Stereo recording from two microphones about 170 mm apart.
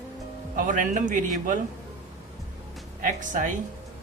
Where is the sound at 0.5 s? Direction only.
50° right (ahead or behind).